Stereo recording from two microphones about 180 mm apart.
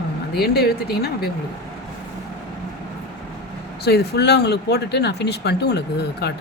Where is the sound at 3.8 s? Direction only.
65° left (ahead or behind).